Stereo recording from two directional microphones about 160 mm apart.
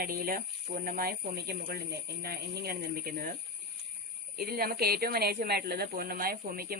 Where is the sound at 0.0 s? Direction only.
65° right (ahead or behind).